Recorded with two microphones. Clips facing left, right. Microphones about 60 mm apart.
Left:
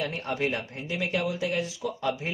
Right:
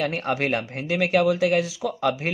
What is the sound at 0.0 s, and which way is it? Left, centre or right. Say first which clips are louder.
Speech: right 5 dB; right.